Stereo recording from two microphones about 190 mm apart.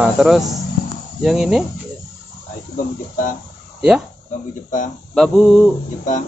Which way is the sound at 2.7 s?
45° left (ahead or behind).